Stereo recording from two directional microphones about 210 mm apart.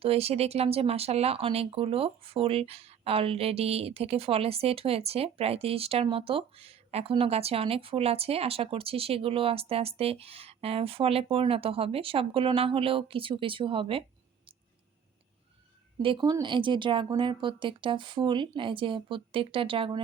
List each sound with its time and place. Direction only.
0.0 s speech: 30° right (ahead or behind)
16.0 s speech: 25° right (ahead or behind)